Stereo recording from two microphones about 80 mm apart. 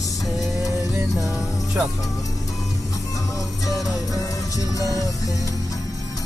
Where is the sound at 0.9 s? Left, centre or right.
Right.